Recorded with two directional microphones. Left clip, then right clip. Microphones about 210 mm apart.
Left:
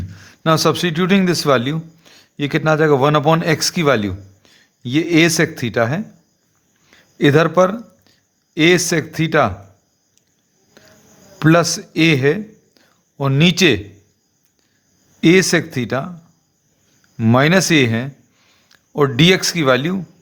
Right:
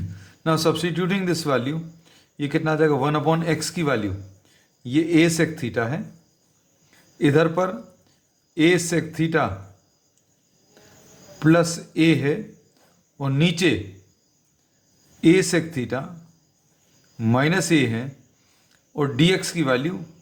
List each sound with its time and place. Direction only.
0.1 s a man's voice: 40° left (ahead or behind)
6.9 s a sound: 40° left (ahead or behind)
8.5 s speech: 40° left (ahead or behind)
11.3 s speech: 45° left (ahead or behind)
15.2 s speech: 40° left (ahead or behind)
17.2 s speech: 45° left (ahead or behind)